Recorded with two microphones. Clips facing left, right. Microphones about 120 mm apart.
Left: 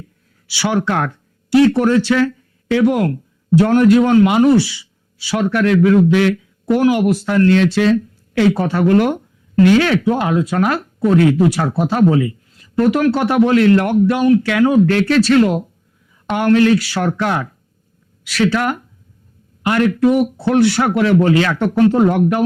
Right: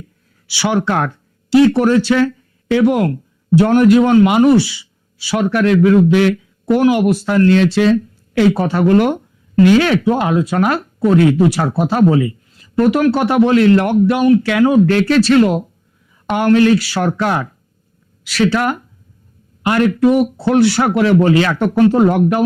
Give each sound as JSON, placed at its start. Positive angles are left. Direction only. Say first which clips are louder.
{"t": 0.4, "sound": "speech", "louder": "right 1 dB", "side_deg": -25}